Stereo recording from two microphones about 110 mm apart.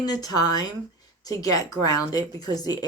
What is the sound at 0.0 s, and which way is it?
A woman's voice, 35° left (ahead or behind).